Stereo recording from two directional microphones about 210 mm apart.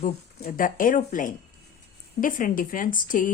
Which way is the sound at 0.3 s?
45° left (ahead or behind).